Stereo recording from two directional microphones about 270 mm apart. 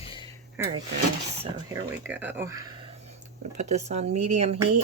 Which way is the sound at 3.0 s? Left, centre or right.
Right.